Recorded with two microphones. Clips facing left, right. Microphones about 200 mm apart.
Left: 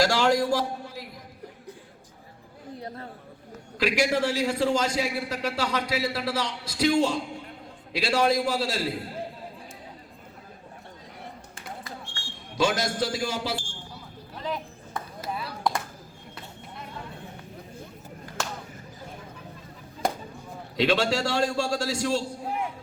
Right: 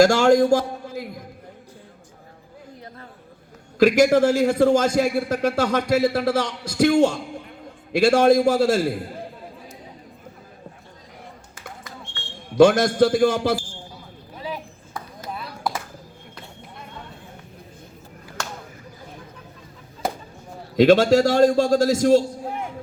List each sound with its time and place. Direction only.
0.0 s a man's voice: 45° right (ahead or behind)
3.8 s a man's voice: 45° right (ahead or behind)
11.8 s a sound: 30° left (ahead or behind)
12.5 s a man's voice: 55° right (ahead or behind)
14.3 s chop: 10° right (ahead or behind)
15.2 s a sound: 5° left (ahead or behind)
20.7 s a man's voice: 45° right (ahead or behind)